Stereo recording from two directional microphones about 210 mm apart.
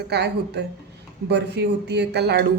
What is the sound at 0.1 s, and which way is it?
Speech, 55° right (ahead or behind).